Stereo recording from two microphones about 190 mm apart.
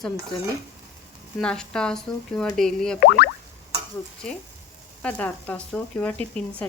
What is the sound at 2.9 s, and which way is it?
Boing, 50° left (ahead or behind).